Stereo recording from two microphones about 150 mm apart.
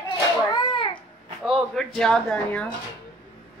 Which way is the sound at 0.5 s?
30° left (ahead or behind).